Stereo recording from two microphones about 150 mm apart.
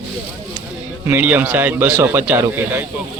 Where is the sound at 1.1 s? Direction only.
10° right (ahead or behind).